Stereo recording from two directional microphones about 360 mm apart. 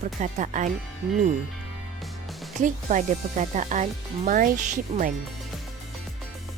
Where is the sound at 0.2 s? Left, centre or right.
Centre.